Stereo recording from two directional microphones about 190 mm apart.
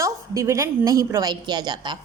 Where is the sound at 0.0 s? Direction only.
15° right (ahead or behind).